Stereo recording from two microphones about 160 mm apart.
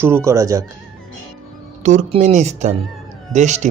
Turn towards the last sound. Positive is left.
turn(degrees=-45)  # may be behind; listen again after turning